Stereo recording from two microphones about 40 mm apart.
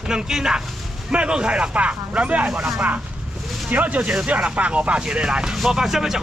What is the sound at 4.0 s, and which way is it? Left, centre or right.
Speech, right.